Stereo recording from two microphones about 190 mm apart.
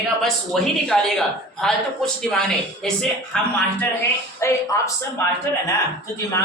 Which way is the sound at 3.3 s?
5° left (ahead or behind).